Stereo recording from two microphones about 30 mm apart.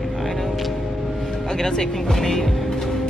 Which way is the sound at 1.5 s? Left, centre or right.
Left.